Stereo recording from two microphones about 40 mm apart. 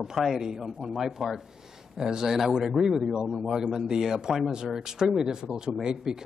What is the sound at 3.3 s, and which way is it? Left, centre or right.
Speech, centre.